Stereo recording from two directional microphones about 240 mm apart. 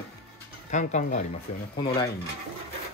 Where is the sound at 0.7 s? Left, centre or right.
Left.